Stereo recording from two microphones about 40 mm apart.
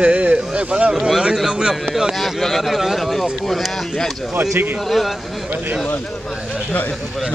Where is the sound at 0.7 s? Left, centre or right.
Right.